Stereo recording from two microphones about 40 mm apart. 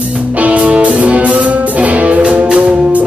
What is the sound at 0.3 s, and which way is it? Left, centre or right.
Music, right.